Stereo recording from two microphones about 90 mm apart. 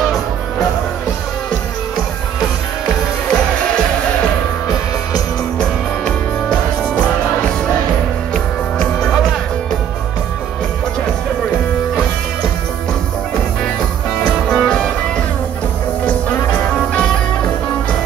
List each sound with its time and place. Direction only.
8.7 s music: 10° left (ahead or behind)
14.2 s music: 10° left (ahead or behind)
16.5 s music: 15° left (ahead or behind)